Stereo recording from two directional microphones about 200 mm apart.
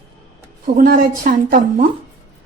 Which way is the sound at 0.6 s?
45° right (ahead or behind).